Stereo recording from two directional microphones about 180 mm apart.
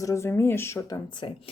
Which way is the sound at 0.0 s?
15° left (ahead or behind).